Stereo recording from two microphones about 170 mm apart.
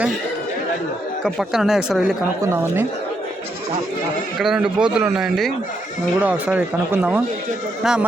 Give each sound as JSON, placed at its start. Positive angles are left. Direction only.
{"t": 1.2, "sound": "a man's voice", "side_deg": 0}
{"t": 2.4, "sound": "speech", "side_deg": -15}
{"t": 4.4, "sound": "a man's voice", "side_deg": -5}